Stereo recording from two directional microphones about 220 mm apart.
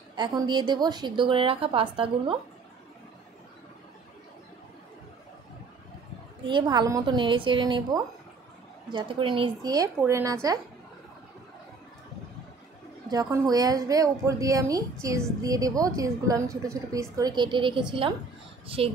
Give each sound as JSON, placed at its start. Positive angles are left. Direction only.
{"t": 0.1, "sound": "a woman's voice", "side_deg": -20}
{"t": 6.4, "sound": "a woman's voice", "side_deg": -20}
{"t": 13.1, "sound": "a woman's voice", "side_deg": -15}